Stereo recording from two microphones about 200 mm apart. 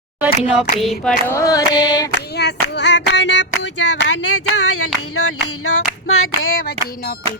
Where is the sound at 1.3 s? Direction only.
15° left (ahead or behind).